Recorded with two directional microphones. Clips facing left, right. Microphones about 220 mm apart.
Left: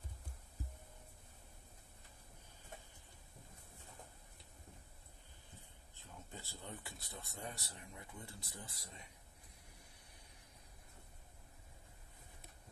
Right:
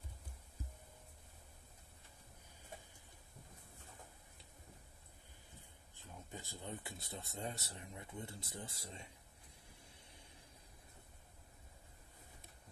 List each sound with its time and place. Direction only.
5.9 s speech: 15° right (ahead or behind)